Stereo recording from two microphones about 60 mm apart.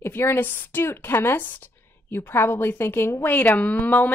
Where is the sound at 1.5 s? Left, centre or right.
Left.